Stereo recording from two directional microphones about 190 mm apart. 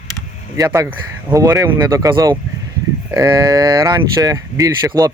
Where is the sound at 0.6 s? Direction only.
15° right (ahead or behind).